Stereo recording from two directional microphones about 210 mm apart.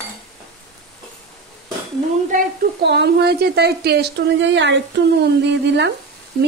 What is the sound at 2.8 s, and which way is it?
A woman's voice, 55° right (ahead or behind).